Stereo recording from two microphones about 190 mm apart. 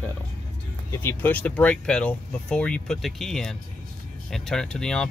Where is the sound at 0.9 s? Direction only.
15° left (ahead or behind).